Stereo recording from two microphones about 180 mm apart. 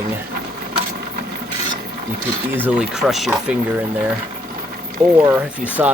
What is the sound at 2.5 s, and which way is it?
Speech, 10° right (ahead or behind).